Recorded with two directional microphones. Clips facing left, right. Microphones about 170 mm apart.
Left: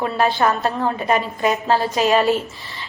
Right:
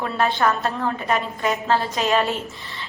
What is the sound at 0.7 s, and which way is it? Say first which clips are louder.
Speech: left 4 dB; 20° left (ahead or behind).